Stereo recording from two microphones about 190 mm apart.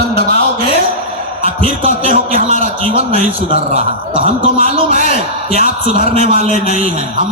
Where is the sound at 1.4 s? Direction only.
30° right (ahead or behind).